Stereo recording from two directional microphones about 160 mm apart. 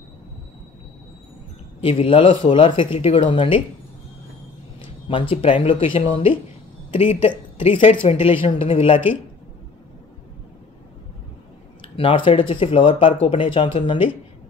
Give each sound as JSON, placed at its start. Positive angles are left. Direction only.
{"t": 1.8, "sound": "speech", "side_deg": 35}
{"t": 5.0, "sound": "speech", "side_deg": 35}
{"t": 11.8, "sound": "speech", "side_deg": 35}